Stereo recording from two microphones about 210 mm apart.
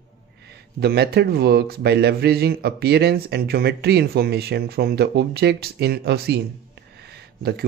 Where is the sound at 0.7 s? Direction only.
50° right (ahead or behind).